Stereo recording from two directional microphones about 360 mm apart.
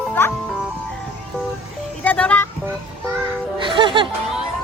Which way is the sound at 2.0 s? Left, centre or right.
Centre.